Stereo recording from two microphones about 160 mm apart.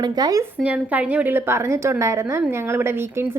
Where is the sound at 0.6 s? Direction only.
10° right (ahead or behind).